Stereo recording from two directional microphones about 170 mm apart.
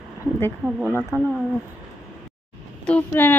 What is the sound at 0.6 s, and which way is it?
Speech, 5° right (ahead or behind).